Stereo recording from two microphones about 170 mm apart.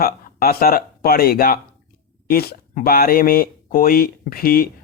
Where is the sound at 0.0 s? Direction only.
60° left (ahead or behind).